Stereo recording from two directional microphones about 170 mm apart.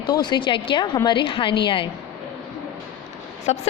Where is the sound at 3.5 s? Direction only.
40° left (ahead or behind).